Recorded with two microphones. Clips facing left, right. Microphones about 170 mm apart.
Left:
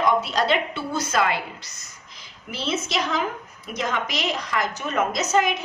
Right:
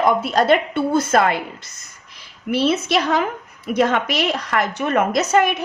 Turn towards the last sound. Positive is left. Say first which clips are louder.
# right 5 dB
turn(degrees=-60)  # may be behind; listen again after turning